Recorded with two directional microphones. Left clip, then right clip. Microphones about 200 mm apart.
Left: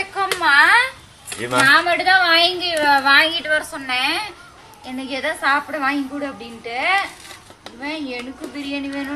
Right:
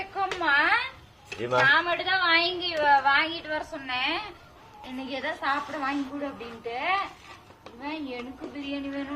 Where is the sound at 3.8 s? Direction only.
10° right (ahead or behind).